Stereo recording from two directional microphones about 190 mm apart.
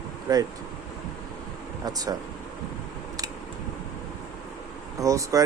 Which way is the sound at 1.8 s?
20° right (ahead or behind).